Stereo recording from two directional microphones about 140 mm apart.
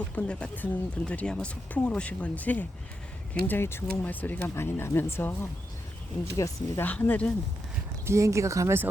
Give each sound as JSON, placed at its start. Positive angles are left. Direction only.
{"t": 0.2, "sound": "speech", "side_deg": 10}
{"t": 6.8, "sound": "speech", "side_deg": 10}
{"t": 8.0, "sound": "speech", "side_deg": -20}